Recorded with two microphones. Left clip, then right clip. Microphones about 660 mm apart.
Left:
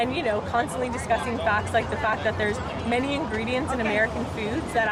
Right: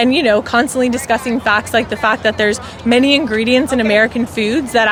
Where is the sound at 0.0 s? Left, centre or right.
Right.